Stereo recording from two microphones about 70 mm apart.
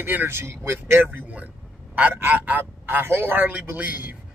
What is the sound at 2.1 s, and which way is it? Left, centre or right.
Speech, right.